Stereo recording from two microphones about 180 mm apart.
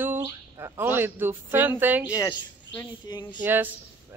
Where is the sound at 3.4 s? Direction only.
10° right (ahead or behind).